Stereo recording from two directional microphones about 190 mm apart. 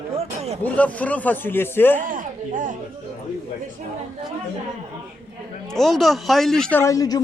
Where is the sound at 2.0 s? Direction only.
45° right (ahead or behind).